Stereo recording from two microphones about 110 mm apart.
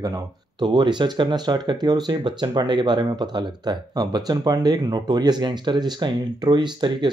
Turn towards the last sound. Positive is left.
turn(degrees=-40)  # may be behind; listen again after turning